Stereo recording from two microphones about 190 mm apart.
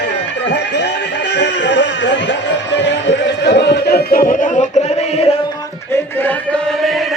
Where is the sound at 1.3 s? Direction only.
65° left (ahead or behind); by 5.4 s 35° left (ahead or behind).